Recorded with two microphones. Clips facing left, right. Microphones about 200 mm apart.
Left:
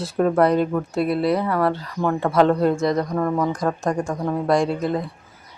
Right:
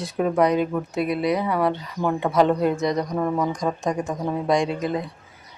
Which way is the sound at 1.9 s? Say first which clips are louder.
Left 2 dB; 10° right (ahead or behind).